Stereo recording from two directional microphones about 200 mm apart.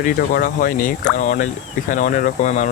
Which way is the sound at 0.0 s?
40° left (ahead or behind).